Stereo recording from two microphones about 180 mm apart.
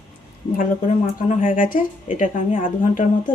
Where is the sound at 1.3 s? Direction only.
50° left (ahead or behind).